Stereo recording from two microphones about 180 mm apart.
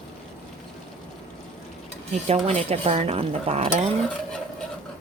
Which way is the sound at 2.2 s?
35° right (ahead or behind).